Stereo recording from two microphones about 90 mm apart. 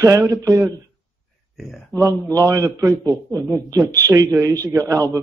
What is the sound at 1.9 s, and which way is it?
Speech, 40° right (ahead or behind).